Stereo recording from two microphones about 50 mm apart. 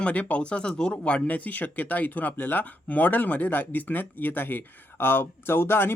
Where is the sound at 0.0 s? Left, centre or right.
Left.